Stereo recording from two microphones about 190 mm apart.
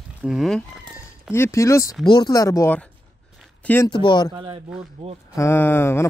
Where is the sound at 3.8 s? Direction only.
25° left (ahead or behind).